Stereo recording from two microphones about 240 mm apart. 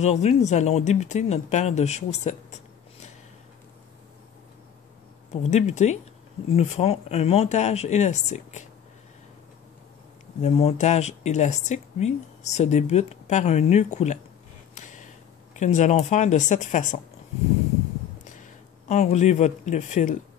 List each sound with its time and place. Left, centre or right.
0.0 s speech: left
5.3 s speech: left
10.4 s speech: left
18.4 s speech: left